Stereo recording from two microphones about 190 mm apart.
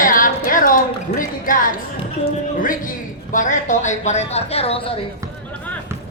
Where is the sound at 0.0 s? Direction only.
45° left (ahead or behind).